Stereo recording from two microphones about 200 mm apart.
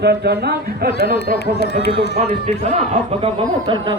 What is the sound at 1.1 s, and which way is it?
Speech, 55° left (ahead or behind).